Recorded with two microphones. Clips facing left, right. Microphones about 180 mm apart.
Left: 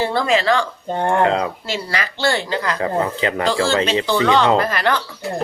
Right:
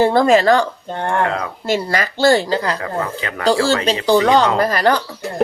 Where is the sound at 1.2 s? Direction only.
25° left (ahead or behind).